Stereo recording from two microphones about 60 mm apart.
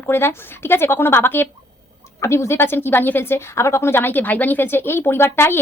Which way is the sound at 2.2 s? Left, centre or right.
Left.